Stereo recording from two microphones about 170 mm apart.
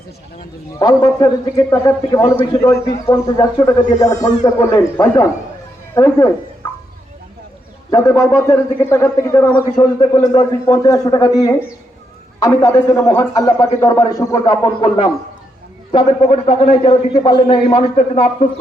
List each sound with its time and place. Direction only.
0.8 s a man's voice: 25° left (ahead or behind)
3.1 s a man's voice: 30° left (ahead or behind)
3.7 s a man's voice: 20° left (ahead or behind)
7.9 s a man's voice: 20° left (ahead or behind); by 18.4 s 40° left (ahead or behind)